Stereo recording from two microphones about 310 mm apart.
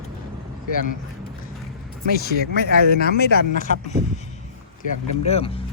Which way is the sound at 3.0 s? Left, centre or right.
Left.